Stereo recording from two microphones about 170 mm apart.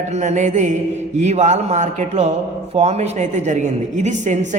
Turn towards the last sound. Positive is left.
turn(degrees=-45)  # may be behind; listen again after turning